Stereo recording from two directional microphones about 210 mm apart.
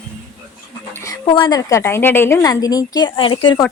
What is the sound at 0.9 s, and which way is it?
A woman's voice, 15° left (ahead or behind).